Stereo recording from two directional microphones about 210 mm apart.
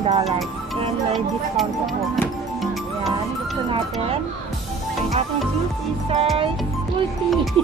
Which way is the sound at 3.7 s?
25° right (ahead or behind).